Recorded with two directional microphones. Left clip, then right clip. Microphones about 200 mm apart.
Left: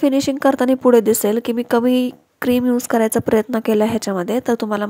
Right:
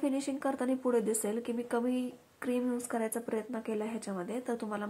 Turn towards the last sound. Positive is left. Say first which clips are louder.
# left 17 dB
turn(degrees=45)  # may be behind; listen again after turning